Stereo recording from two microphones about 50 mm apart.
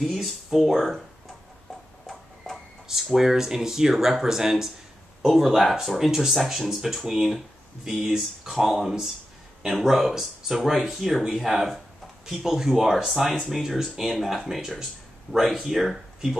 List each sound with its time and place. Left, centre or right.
0.0 s speech: centre
2.0 s a sound: centre
2.9 s speech: centre